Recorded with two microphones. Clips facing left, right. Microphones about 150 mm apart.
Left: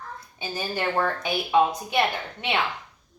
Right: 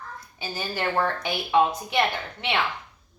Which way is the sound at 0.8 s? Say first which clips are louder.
Even; 5° left (ahead or behind).